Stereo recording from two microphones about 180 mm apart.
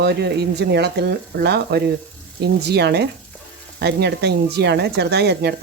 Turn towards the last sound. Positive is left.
turn(degrees=-65)  # may be behind; listen again after turning